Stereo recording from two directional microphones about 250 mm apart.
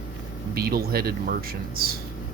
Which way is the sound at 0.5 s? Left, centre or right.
Right.